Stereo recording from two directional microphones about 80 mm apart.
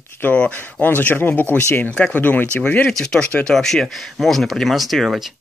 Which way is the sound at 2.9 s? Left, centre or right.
Centre.